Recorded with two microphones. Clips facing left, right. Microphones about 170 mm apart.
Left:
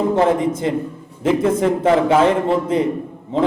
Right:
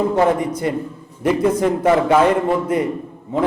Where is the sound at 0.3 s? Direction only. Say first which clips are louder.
Left 1 dB; 25° left (ahead or behind).